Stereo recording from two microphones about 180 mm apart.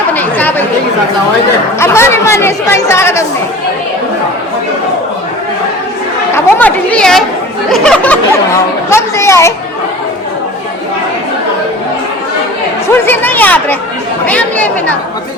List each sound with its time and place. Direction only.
0.1 s chatter: 10° left (ahead or behind)
1.8 s speech: 15° left (ahead or behind)
6.3 s speech: 10° left (ahead or behind)
12.9 s speech: 10° left (ahead or behind)